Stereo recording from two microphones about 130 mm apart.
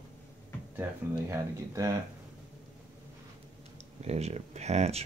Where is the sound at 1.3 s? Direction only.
25° right (ahead or behind).